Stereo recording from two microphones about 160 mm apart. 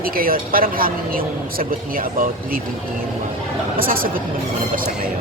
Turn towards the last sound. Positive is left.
turn(degrees=-65)  # may be behind; listen again after turning